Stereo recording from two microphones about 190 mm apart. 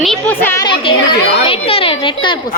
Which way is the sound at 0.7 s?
25° left (ahead or behind).